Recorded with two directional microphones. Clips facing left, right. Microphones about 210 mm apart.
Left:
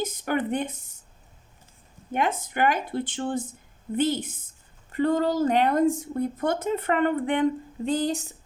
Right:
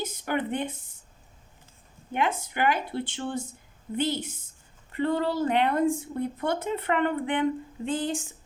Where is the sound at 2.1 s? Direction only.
45° left (ahead or behind).